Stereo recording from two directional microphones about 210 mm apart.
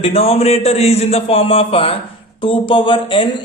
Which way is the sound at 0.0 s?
30° left (ahead or behind).